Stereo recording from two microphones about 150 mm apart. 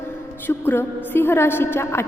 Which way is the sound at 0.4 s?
15° left (ahead or behind).